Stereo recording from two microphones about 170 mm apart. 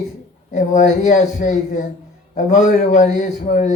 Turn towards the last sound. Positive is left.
turn(degrees=50)  # may be behind; listen again after turning